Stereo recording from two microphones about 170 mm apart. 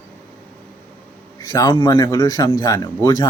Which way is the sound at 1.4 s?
25° left (ahead or behind).